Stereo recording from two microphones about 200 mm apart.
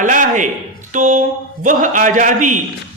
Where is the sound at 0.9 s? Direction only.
40° right (ahead or behind).